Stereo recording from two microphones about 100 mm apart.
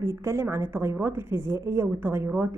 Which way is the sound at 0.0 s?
25° right (ahead or behind).